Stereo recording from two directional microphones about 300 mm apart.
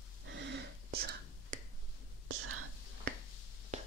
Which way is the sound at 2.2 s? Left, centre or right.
Right.